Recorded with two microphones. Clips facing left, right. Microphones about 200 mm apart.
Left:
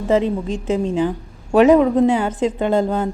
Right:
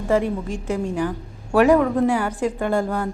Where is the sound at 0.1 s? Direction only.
20° left (ahead or behind).